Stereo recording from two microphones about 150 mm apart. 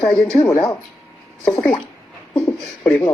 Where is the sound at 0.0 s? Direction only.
5° left (ahead or behind).